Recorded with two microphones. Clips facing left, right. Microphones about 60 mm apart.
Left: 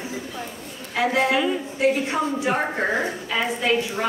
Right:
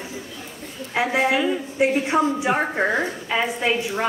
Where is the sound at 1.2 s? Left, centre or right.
Centre.